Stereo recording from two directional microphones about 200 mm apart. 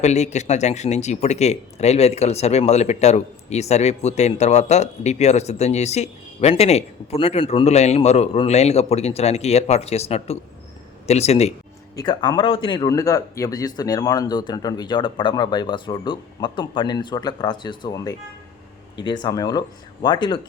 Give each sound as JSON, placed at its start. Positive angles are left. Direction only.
{"t": 0.0, "sound": "speech", "side_deg": 35}
{"t": 11.9, "sound": "speech", "side_deg": 20}